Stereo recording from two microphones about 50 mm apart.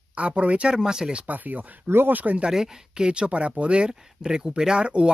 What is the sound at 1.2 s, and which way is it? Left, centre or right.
Speech, right.